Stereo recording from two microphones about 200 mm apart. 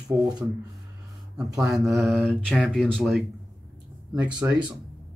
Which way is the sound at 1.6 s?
Centre (ahead or behind).